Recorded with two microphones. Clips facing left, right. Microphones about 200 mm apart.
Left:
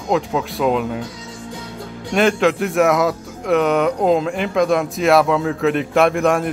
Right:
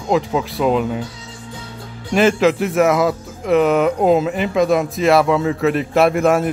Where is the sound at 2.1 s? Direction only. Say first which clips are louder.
Right 2 dB; centre (ahead or behind).